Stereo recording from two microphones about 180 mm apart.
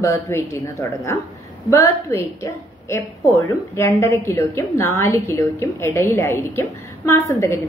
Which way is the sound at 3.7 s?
15° left (ahead or behind).